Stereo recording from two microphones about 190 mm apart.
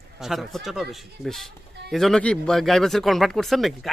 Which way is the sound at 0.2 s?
Centre (ahead or behind).